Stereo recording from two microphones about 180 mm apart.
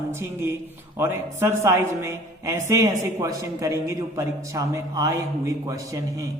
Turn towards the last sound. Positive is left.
turn(degrees=-15)  # may be behind; listen again after turning